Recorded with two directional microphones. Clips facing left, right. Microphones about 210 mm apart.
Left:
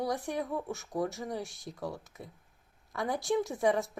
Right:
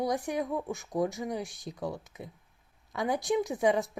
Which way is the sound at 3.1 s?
20° right (ahead or behind).